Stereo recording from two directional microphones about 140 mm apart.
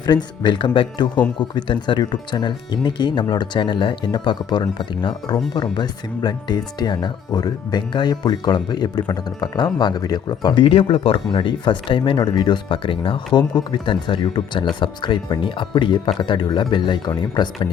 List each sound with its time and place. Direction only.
0.0 s speech: 30° left (ahead or behind)